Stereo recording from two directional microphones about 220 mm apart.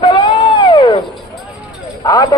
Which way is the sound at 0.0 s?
20° left (ahead or behind).